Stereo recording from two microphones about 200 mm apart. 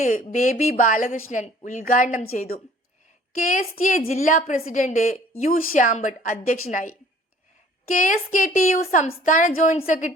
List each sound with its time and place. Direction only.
0.0 s a woman's voice: 35° left (ahead or behind)
3.3 s a woman's voice: 40° left (ahead or behind)
7.9 s a woman's voice: 40° left (ahead or behind)